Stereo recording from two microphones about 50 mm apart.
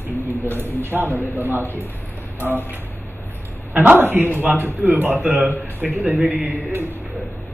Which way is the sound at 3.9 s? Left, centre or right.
Right.